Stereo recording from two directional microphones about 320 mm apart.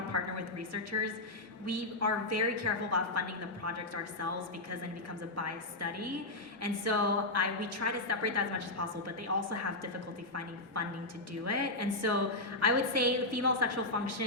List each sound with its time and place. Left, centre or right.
0.1 s a sound: right
1.6 s a woman's voice: right
5.4 s a woman's voice: right
11.4 s a woman's voice: right